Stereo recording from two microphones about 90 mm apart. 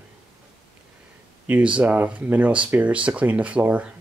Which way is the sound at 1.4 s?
15° right (ahead or behind).